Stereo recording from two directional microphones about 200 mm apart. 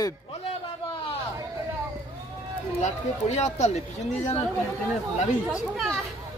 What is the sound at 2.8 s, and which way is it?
Speech, 35° left (ahead or behind).